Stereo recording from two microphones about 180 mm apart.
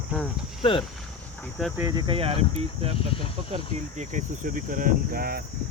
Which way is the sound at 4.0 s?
45° right (ahead or behind).